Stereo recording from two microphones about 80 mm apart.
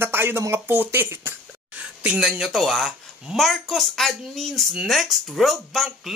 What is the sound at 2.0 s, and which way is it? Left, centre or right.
A woman's voice, centre.